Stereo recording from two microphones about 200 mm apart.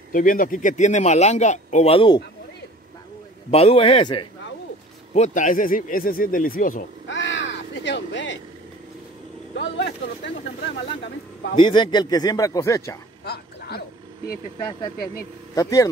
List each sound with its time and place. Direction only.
0.1 s a man's voice: 45° left (ahead or behind); by 2.2 s 25° left (ahead or behind)
3.4 s a man's voice: 30° left (ahead or behind)
5.1 s speech: 35° left (ahead or behind)
7.1 s crow: 65° left (ahead or behind)
9.6 s speech: 60° left (ahead or behind)
11.5 s a man's voice: 25° left (ahead or behind)
13.2 s a sound: 55° left (ahead or behind)
15.5 s speech: 15° left (ahead or behind)